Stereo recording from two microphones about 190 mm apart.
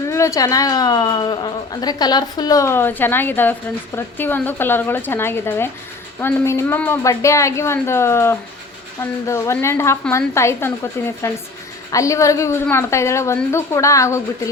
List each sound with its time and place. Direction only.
0.1 s a woman's voice: 15° left (ahead or behind)